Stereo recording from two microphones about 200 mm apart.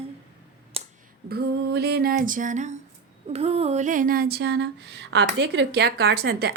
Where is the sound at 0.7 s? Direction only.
30° right (ahead or behind).